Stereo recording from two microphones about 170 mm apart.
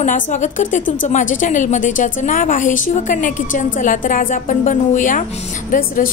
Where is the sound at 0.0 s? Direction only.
45° left (ahead or behind).